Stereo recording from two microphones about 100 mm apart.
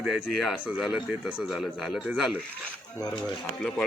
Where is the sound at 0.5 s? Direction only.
15° right (ahead or behind).